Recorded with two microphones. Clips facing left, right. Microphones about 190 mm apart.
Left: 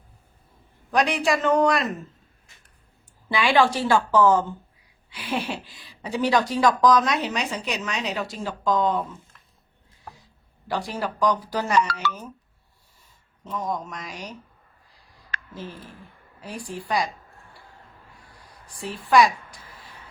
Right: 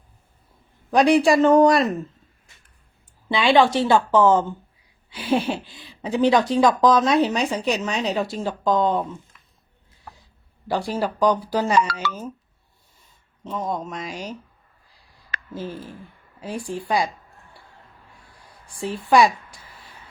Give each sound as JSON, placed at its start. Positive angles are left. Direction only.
{"t": 0.9, "sound": "speech", "side_deg": -35}
{"t": 3.2, "sound": "speech", "side_deg": -20}
{"t": 10.7, "sound": "speech", "side_deg": -30}
{"t": 13.4, "sound": "speech", "side_deg": -25}
{"t": 15.3, "sound": "a sound", "side_deg": -10}
{"t": 16.4, "sound": "speech", "side_deg": -25}